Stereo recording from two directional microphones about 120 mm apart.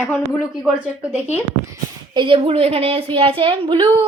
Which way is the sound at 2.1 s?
45° right (ahead or behind).